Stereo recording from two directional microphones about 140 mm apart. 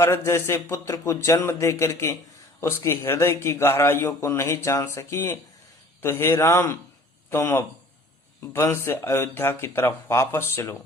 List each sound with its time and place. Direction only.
0.0 s speech: 20° left (ahead or behind)